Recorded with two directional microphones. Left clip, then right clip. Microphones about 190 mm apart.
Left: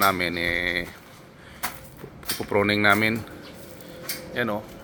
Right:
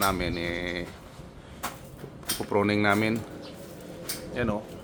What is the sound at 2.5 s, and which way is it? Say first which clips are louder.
Speech: left 4 dB; centre (ahead or behind).